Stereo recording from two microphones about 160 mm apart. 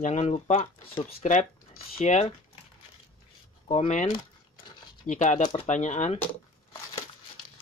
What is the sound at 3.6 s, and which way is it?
Speech, 40° left (ahead or behind).